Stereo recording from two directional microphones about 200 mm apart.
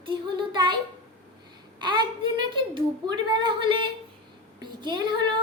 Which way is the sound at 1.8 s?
25° right (ahead or behind).